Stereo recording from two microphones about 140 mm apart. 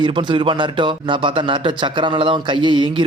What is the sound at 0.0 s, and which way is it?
A man's voice, 35° right (ahead or behind).